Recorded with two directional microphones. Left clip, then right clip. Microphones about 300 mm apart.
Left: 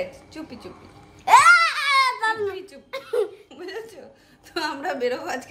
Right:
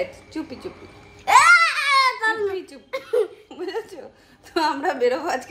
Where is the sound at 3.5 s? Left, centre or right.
Centre.